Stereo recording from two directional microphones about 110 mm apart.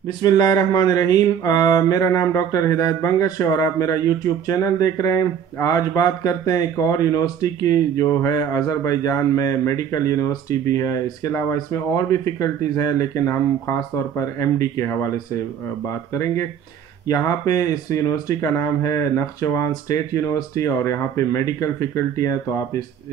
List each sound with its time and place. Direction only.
0.2 s mantra: 35° left (ahead or behind)
14.9 s speech: 25° left (ahead or behind)
17.1 s mantra: 30° left (ahead or behind)